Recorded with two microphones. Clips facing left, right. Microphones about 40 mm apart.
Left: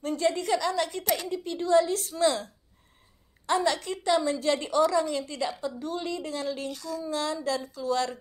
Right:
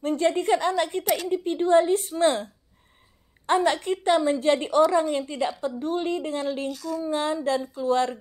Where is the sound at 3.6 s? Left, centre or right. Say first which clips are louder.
Right 4 dB; right.